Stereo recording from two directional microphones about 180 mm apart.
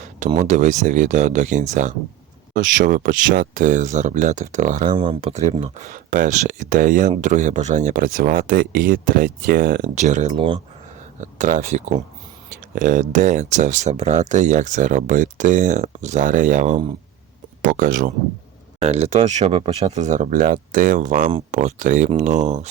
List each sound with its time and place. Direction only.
0.3 s speech: 40° right (ahead or behind)
4.9 s speech: 30° right (ahead or behind)
5.3 s speech: 40° right (ahead or behind)
18.8 s speech: 35° right (ahead or behind)